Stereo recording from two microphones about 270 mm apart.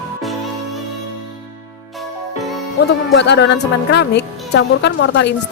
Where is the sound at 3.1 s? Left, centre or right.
Left.